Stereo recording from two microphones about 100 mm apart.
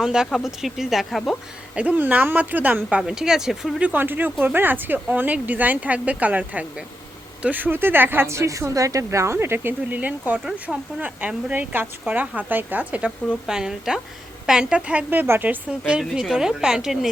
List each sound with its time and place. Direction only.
0.0 s speech: 5° right (ahead or behind)
1.7 s speech: 15° right (ahead or behind)
3.0 s speech: 5° right (ahead or behind)
3.8 s speech: 15° right (ahead or behind)
15.9 s speech: 5° right (ahead or behind)